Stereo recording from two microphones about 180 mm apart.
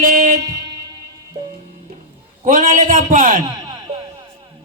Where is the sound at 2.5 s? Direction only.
50° right (ahead or behind).